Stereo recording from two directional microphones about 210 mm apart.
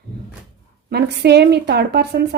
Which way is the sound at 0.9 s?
50° right (ahead or behind).